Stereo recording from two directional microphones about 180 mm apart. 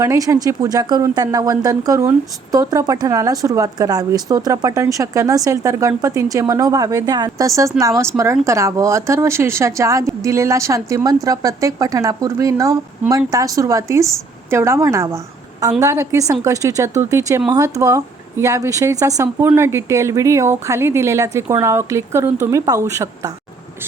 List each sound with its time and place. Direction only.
0.0 s a woman's voice: 15° right (ahead or behind)